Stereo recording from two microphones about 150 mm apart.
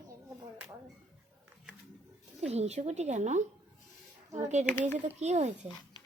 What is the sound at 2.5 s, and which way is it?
Speech, 45° right (ahead or behind).